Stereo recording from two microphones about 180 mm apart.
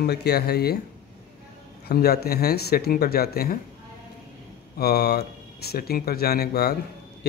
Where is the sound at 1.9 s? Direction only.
60° left (ahead or behind).